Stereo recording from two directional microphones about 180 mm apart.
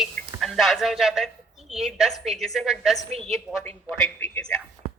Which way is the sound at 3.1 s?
35° right (ahead or behind).